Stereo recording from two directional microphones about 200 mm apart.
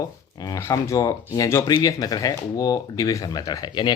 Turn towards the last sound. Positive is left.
turn(degrees=20)  # may be behind; listen again after turning